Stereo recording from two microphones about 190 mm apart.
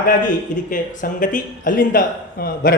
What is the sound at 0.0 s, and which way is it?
Speech, 45° left (ahead or behind).